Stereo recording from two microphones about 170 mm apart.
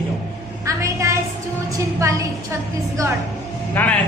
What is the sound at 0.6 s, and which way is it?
Speech, 20° right (ahead or behind).